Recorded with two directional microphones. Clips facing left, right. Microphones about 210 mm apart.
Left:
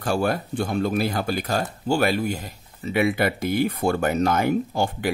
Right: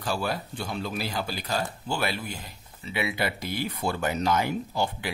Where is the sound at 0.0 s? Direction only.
50° left (ahead or behind).